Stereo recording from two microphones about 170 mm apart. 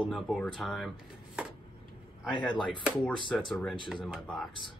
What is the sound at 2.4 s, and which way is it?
Speech, 5° left (ahead or behind).